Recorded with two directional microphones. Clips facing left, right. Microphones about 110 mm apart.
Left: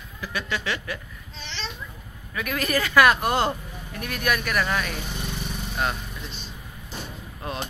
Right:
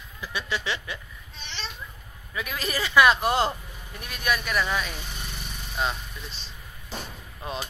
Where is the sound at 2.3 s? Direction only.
15° right (ahead or behind).